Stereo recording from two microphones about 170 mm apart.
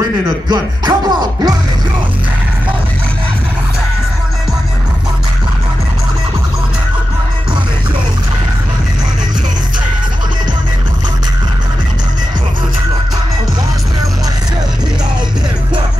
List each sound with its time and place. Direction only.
0.5 s music: 25° right (ahead or behind)